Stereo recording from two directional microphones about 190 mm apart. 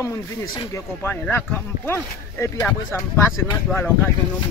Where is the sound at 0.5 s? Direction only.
15° left (ahead or behind).